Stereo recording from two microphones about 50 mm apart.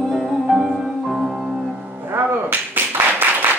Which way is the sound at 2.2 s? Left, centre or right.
Right.